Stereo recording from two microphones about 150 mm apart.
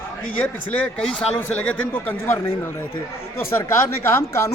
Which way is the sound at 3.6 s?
15° left (ahead or behind).